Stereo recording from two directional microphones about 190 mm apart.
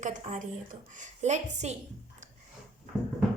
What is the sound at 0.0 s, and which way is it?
Speech, 40° right (ahead or behind).